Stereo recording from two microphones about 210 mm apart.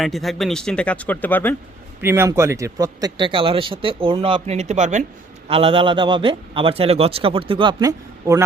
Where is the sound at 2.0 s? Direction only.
10° right (ahead or behind).